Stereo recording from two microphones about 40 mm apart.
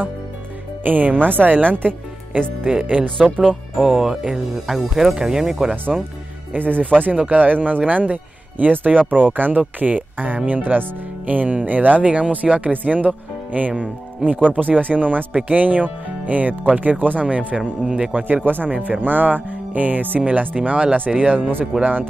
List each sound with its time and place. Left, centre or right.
0.8 s speech: right
2.6 s speech: right
3.7 s speech: centre
6.5 s speech: right
12.7 s speech: right
14.5 s speech: right
18.2 s speech: right
21.7 s speech: right